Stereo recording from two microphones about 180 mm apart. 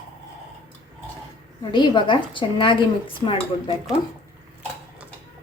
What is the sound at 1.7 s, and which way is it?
A woman's voice, 25° left (ahead or behind).